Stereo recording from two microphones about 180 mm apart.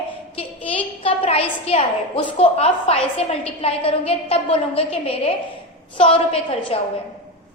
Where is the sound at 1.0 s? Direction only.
30° left (ahead or behind).